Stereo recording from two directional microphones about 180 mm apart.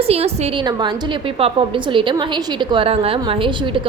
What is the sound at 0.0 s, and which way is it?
A woman's voice, 35° right (ahead or behind).